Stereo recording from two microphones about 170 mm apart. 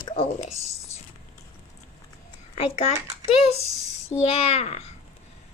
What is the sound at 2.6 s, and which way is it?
A child's voice, 40° left (ahead or behind).